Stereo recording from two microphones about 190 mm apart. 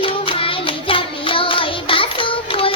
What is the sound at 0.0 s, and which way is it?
Hands, 30° left (ahead or behind).